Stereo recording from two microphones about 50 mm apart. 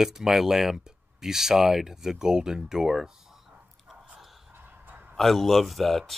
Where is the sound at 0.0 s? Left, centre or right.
Centre.